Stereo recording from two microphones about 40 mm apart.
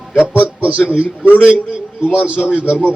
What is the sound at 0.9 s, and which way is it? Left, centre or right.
Speech, right.